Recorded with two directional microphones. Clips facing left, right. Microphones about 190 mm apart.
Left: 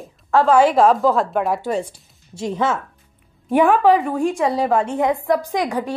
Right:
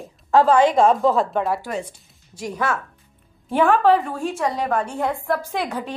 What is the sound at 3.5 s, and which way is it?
A woman's voice, 15° left (ahead or behind).